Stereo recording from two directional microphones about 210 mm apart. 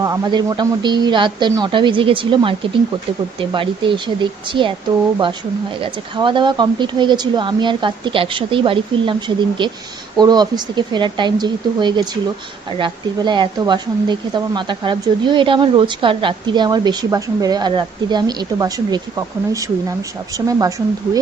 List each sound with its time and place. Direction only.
0.0 s speech: 20° right (ahead or behind)
5.8 s speech: 25° right (ahead or behind)